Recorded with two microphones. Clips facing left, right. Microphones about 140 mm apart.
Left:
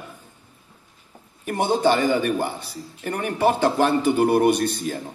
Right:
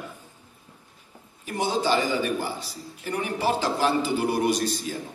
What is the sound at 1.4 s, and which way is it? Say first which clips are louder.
A man's voice: left 5 dB; 60° left (ahead or behind).